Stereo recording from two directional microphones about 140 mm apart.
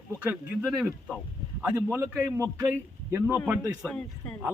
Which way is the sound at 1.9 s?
15° right (ahead or behind).